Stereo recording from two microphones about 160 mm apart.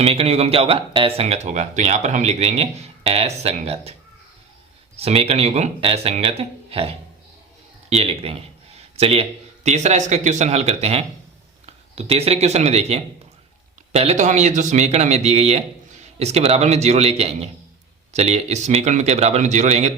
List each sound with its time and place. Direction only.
0.0 s speech: 40° right (ahead or behind)
4.9 s speech: 40° right (ahead or behind)
7.9 s a sound: 40° right (ahead or behind)
9.6 s speech: 45° right (ahead or behind)